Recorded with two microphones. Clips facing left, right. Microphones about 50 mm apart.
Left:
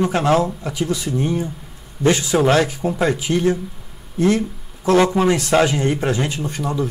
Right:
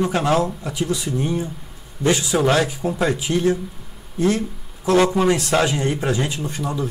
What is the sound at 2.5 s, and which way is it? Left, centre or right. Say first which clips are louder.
Speech: left 2 dB; left.